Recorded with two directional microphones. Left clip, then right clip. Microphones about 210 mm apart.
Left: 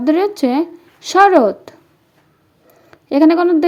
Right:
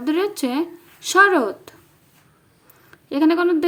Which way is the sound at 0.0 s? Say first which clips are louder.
Left 7 dB; 20° left (ahead or behind).